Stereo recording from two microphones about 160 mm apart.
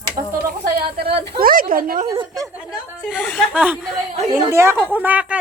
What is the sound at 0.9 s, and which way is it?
A woman's voice, 85° right.